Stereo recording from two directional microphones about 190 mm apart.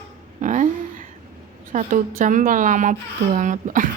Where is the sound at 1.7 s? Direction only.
40° right (ahead or behind).